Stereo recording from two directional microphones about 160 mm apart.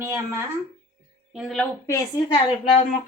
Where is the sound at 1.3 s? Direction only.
Centre (ahead or behind).